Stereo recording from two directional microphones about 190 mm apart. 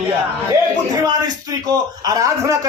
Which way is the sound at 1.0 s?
20° right (ahead or behind).